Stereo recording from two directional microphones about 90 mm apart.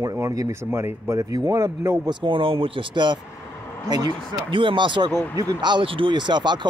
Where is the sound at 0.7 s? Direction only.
25° right (ahead or behind).